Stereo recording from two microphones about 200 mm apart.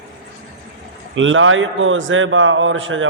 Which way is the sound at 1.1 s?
75° right (ahead or behind).